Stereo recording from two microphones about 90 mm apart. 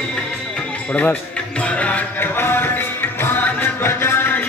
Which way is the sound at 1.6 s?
15° left (ahead or behind).